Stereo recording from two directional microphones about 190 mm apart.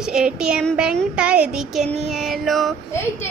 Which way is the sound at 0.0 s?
5° right (ahead or behind).